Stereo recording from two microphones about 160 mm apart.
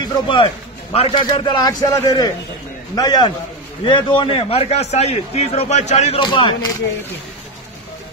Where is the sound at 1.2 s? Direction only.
25° left (ahead or behind); by 6.2 s 45° left (ahead or behind).